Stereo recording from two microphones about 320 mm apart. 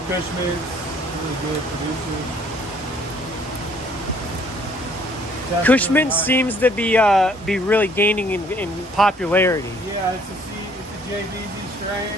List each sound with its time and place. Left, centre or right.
5.6 s speech: centre